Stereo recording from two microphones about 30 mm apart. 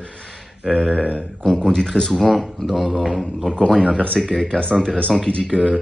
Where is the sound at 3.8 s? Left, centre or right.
Right.